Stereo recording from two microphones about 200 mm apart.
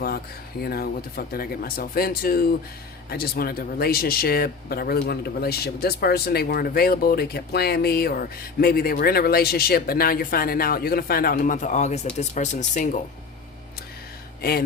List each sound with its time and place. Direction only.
0.6 s speech: 50° left (ahead or behind)
14.4 s speech: 50° left (ahead or behind)